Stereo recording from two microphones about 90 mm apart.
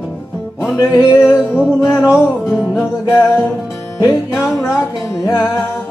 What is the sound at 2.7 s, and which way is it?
Music, 25° left (ahead or behind).